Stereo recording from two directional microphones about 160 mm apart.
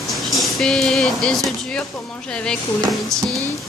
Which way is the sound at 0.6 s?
5° left (ahead or behind).